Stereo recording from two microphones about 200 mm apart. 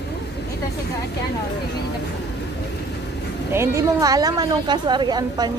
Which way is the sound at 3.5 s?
15° right (ahead or behind).